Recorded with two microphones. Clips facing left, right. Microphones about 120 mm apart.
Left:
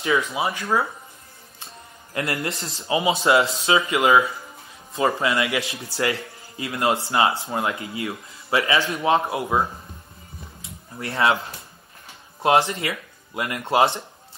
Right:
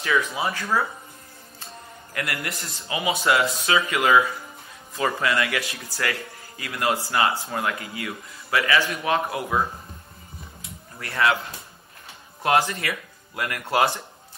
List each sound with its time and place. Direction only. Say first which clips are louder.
0.0 s a man's voice: left 2 dB; 20° left (ahead or behind)
2.1 s a man's voice: left 4 dB; 25° left (ahead or behind)
11.0 s a man's voice: left 2 dB; 25° left (ahead or behind)
12.4 s a man's voice: left 3 dB; 20° left (ahead or behind)